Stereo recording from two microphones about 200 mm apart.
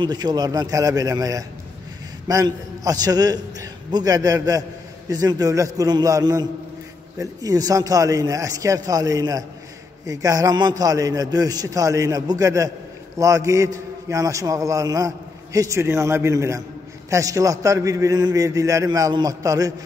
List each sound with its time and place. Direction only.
0.0 s a man's voice: 20° right (ahead or behind)